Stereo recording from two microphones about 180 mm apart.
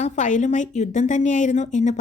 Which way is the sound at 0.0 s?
40° left (ahead or behind).